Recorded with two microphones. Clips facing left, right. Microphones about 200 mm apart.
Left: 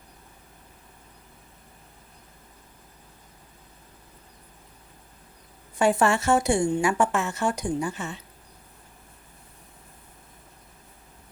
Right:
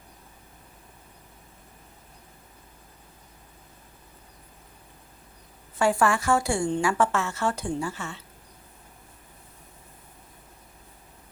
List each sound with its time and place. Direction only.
5.8 s a woman's voice: 20° left (ahead or behind)